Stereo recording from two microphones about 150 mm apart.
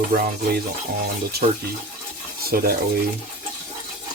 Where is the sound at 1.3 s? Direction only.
90° right.